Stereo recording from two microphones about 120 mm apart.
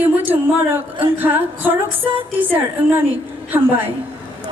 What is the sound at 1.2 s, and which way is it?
Speech, 15° right (ahead or behind).